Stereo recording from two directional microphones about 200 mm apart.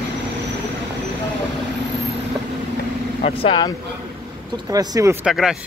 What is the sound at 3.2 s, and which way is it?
Speech, 30° left (ahead or behind).